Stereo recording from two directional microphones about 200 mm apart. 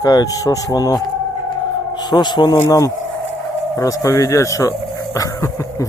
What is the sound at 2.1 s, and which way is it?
Speech, 20° left (ahead or behind).